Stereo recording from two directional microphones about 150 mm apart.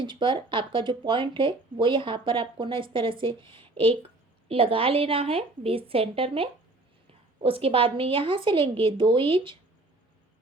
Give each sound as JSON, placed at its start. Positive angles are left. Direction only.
{"t": 0.0, "sound": "speech", "side_deg": -30}